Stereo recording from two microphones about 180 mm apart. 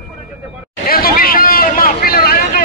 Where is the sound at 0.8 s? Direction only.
55° left (ahead or behind).